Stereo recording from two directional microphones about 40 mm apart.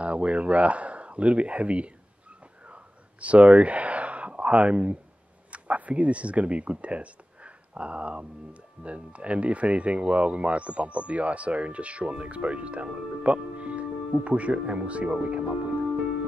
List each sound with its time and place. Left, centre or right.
0.0 s speech: right
2.6 s whispering: right
5.5 s speech: right